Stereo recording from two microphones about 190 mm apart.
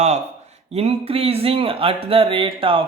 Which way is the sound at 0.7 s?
30° right (ahead or behind).